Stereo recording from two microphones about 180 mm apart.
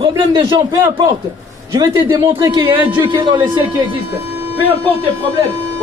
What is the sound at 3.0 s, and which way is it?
Speech, 25° right (ahead or behind).